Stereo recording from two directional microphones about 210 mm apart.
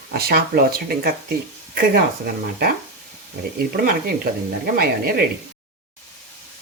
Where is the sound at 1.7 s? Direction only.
45° right (ahead or behind).